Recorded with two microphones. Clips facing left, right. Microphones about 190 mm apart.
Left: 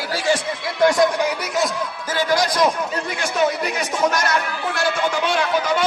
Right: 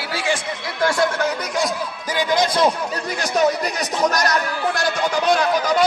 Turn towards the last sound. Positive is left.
turn(degrees=-40)  # may be behind; listen again after turning